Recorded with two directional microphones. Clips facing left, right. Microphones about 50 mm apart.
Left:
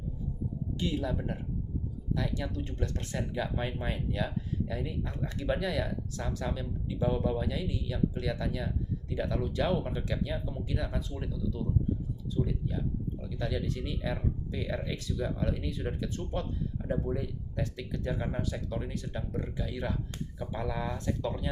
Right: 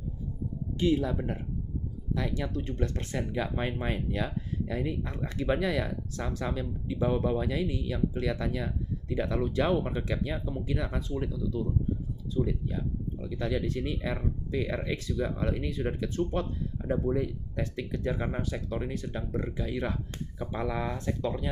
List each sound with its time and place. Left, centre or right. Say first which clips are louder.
0.8 s speech: right 6 dB; right
13.4 s speech: right 4 dB; right
16.9 s speech: right 5 dB; right
17.6 s speech: right 3 dB; right